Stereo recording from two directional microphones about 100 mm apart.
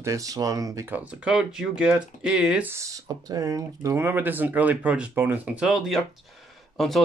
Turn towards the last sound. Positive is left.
turn(degrees=5)  # may be behind; listen again after turning